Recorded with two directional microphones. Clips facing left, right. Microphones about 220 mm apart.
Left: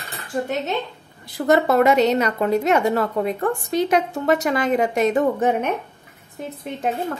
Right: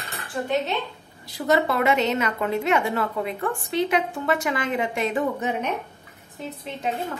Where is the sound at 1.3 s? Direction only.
50° left (ahead or behind).